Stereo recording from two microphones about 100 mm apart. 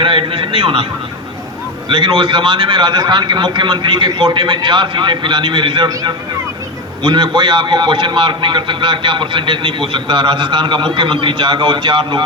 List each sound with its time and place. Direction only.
0.0 s a man's voice: 60° right (ahead or behind)
1.9 s a man's voice: 55° right (ahead or behind)
5.9 s speech: 35° right (ahead or behind)
7.0 s a man's voice: 50° right (ahead or behind)